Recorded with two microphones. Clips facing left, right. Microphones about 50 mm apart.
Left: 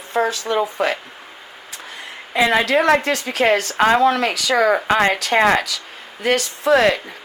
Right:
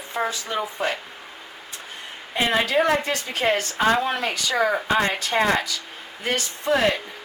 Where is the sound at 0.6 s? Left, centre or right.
Left.